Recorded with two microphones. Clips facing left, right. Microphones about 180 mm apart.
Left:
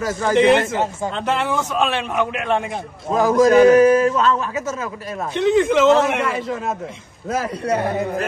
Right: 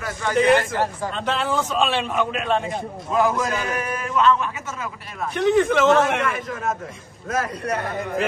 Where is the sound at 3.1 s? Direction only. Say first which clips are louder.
Left 9 dB; 35° left (ahead or behind).